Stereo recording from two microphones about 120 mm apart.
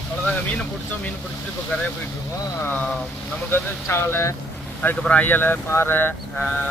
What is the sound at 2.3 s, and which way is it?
Speech, 25° left (ahead or behind).